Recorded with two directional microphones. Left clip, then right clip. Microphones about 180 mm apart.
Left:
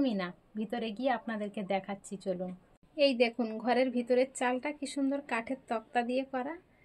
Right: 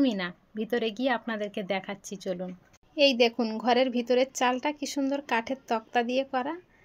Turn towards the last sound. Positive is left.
turn(degrees=-45)  # may be behind; listen again after turning